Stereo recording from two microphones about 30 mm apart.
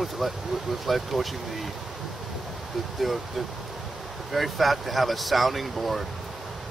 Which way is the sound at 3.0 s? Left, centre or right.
Centre.